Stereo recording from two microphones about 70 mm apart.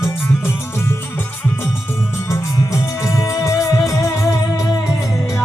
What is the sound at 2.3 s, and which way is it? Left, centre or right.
Music, left.